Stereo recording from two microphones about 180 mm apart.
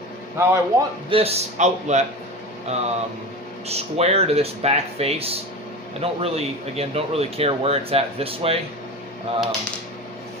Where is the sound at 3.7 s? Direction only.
35° right (ahead or behind).